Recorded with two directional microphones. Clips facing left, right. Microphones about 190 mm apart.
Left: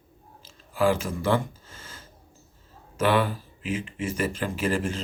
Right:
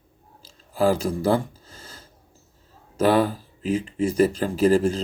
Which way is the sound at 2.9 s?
35° right (ahead or behind).